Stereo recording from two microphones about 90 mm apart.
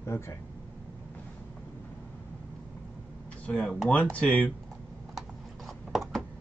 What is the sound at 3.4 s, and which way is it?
Speech, 10° left (ahead or behind).